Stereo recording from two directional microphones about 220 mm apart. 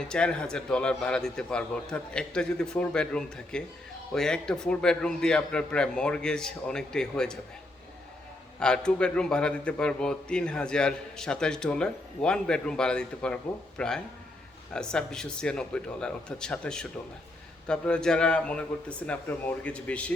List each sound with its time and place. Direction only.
0.0 s a man's voice: 5° left (ahead or behind)
8.5 s a man's voice: 5° left (ahead or behind)